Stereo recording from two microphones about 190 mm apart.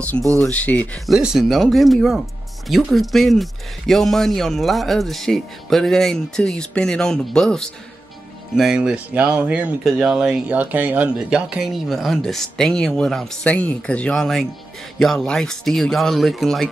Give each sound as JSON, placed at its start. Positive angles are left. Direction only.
{"t": 0.4, "sound": "speech", "side_deg": 10}